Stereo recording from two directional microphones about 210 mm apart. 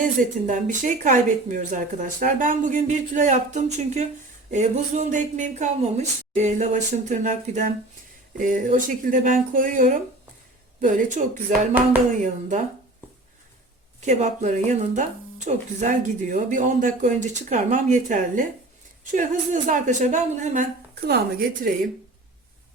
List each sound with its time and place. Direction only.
0.0 s speech: 35° right (ahead or behind)
12.2 s speech: 35° right (ahead or behind)
14.0 s speech: 35° right (ahead or behind)
21.1 s a woman's voice: 45° right (ahead or behind)